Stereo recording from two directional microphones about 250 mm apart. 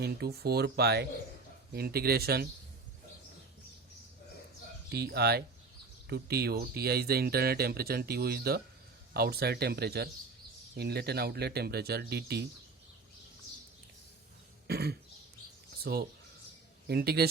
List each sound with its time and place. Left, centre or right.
0.0 s speech: right
4.9 s speech: right
14.7 s a man's voice: right